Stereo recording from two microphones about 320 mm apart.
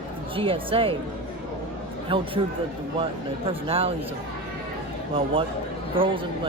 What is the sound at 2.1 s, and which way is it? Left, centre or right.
Speech, centre.